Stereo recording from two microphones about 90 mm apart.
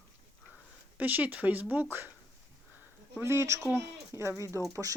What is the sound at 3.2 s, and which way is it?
Speech, 30° right (ahead or behind).